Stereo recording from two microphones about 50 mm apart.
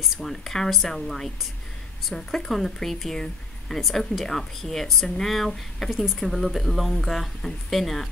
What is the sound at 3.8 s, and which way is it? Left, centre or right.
Speech, centre.